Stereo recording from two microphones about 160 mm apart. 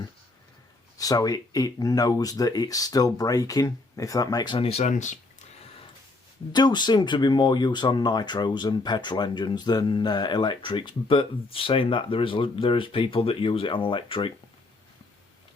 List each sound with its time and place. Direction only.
0.9 s speech: 20° left (ahead or behind); by 5.5 s 50° left (ahead or behind)
6.5 s speech: 25° left (ahead or behind)